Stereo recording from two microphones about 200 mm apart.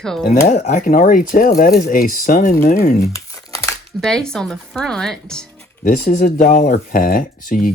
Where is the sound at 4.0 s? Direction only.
5° left (ahead or behind).